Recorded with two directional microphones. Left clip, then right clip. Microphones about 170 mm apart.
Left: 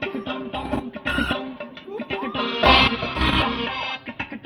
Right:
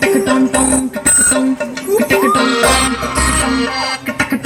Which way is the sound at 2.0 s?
45° left (ahead or behind).